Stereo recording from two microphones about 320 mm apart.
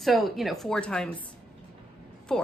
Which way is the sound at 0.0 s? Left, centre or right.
Centre.